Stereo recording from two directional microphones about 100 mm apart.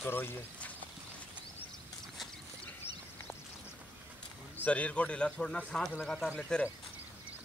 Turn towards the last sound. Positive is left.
turn(degrees=10)  # may be behind; listen again after turning